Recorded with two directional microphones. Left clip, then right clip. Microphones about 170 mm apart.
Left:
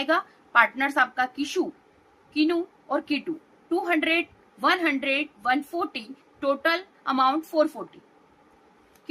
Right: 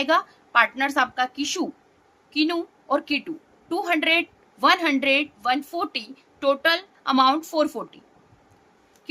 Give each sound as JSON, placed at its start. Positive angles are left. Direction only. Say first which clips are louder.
{"t": 0.0, "sound": "a woman's voice", "louder": "right 3 dB", "side_deg": -50}